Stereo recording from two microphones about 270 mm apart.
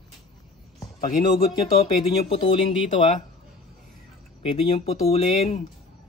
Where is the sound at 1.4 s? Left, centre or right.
Left.